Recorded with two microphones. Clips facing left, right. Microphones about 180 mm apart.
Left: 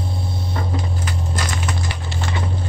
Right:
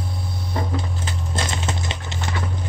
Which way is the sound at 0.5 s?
25° right (ahead or behind).